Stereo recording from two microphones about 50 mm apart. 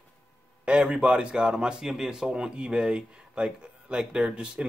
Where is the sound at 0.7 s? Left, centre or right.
Centre.